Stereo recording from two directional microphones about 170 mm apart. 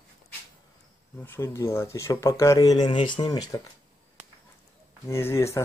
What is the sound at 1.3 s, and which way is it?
Speech, 15° left (ahead or behind).